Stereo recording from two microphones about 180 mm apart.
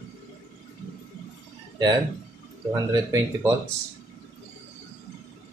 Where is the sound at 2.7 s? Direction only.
20° right (ahead or behind).